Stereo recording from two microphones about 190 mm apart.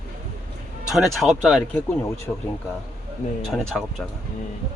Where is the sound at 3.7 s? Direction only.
Centre (ahead or behind).